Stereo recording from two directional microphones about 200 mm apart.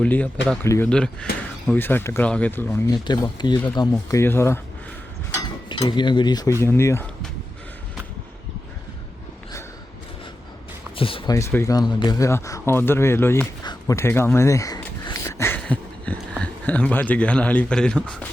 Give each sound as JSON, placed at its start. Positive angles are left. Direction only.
{"t": 0.0, "sound": "speech", "side_deg": 5}
{"t": 5.6, "sound": "cutlery", "side_deg": 20}
{"t": 6.6, "sound": "speech", "side_deg": 15}
{"t": 10.9, "sound": "speech", "side_deg": 25}
{"t": 11.3, "sound": "speech", "side_deg": 15}